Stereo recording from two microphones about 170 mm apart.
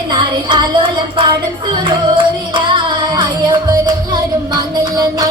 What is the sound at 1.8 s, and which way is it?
Music, 30° right (ahead or behind).